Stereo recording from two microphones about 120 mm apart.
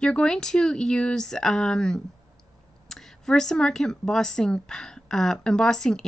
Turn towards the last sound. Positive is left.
turn(degrees=5)  # may be behind; listen again after turning